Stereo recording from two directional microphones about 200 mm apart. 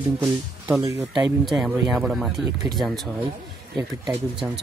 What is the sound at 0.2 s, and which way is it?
Speech, centre (ahead or behind).